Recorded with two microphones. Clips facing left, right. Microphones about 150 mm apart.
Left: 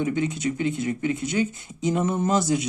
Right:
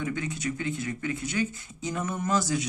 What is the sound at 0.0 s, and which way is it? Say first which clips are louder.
Speech: left 7 dB; 20° left (ahead or behind).